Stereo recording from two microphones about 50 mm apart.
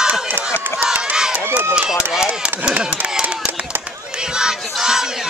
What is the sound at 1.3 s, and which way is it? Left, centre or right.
Run, right.